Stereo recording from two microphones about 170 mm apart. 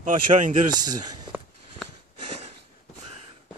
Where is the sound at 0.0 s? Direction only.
50° right (ahead or behind).